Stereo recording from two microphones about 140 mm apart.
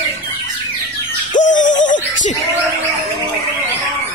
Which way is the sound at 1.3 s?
65° left (ahead or behind).